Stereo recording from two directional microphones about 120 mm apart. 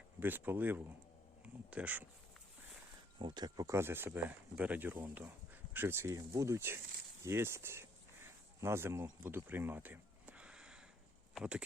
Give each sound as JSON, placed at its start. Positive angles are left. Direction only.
{"t": 0.2, "sound": "speech", "side_deg": -15}
{"t": 3.2, "sound": "speech", "side_deg": -40}